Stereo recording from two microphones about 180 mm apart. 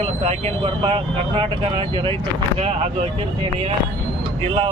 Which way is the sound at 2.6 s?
35° right (ahead or behind).